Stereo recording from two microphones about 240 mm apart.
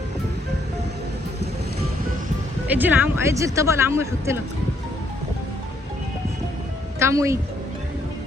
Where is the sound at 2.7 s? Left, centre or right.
Centre.